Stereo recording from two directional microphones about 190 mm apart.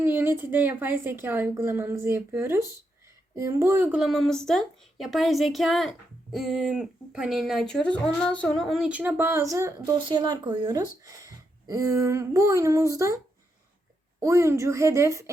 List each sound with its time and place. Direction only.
0.0 s speech: 10° right (ahead or behind)
14.2 s speech: 15° right (ahead or behind)